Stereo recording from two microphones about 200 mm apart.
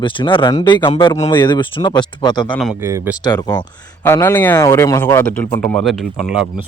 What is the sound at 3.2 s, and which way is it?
A man's voice, 20° left (ahead or behind).